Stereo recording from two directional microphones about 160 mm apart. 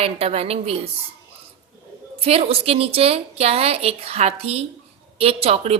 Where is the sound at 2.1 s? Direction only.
40° right (ahead or behind).